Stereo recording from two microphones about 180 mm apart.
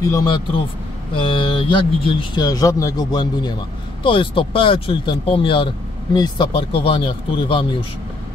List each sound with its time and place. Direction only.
0.0 s speech: 20° left (ahead or behind)